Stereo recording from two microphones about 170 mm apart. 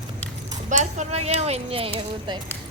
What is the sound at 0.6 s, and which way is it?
Speech, 45° right (ahead or behind).